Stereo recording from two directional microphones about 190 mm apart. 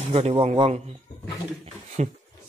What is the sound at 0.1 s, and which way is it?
Speech, 30° right (ahead or behind).